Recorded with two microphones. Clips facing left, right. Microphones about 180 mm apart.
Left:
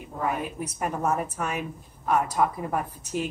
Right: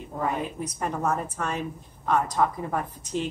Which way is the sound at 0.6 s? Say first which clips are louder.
Even; 10° left (ahead or behind).